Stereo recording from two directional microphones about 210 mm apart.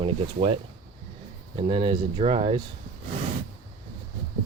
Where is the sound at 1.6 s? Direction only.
25° right (ahead or behind).